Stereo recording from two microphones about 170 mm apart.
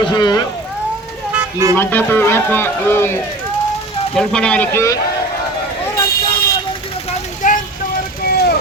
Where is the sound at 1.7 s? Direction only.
10° left (ahead or behind).